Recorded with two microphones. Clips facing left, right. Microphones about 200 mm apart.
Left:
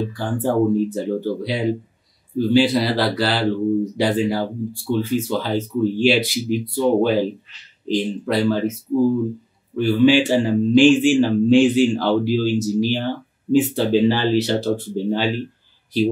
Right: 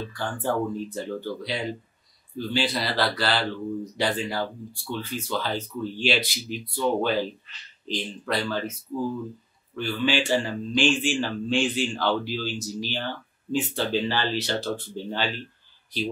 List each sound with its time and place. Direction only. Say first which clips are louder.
0.0 s speech: left 7 dB; 5° left (ahead or behind)
8.9 s speech: left 11 dB; 30° left (ahead or behind)
9.8 s speech: left 11 dB; 5° left (ahead or behind)